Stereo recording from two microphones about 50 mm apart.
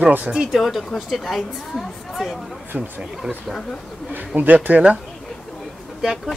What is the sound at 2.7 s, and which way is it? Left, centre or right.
Speech, right.